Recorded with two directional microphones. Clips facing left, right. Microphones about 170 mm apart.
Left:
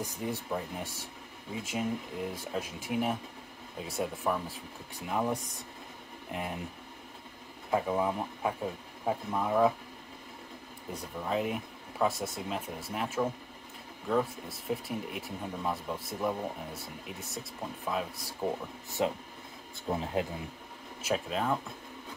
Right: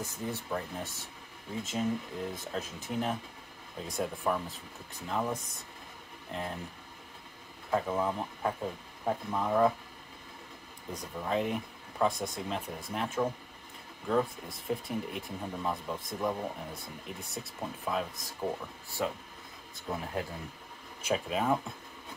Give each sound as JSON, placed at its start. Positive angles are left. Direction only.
{"t": 0.0, "sound": "speech", "side_deg": 10}
{"t": 7.7, "sound": "speech", "side_deg": 10}
{"t": 10.9, "sound": "speech", "side_deg": 5}
{"t": 14.7, "sound": "speech", "side_deg": 5}
{"t": 18.9, "sound": "speech", "side_deg": 20}
{"t": 21.0, "sound": "speech", "side_deg": 0}